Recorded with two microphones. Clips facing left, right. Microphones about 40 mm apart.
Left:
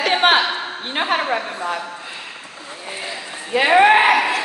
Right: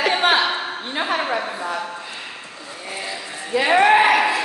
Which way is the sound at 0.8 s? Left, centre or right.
Left.